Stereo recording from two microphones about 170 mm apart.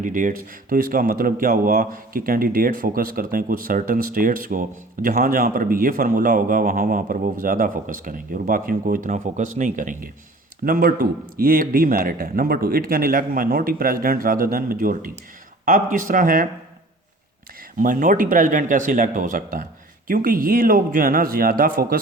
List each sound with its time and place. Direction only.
0.0 s speech: 50° right (ahead or behind)
17.7 s speech: 55° right (ahead or behind)